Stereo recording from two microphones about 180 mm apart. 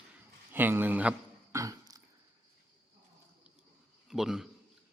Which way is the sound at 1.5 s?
20° right (ahead or behind).